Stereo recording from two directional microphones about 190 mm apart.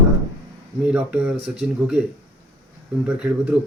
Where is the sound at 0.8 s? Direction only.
5° right (ahead or behind).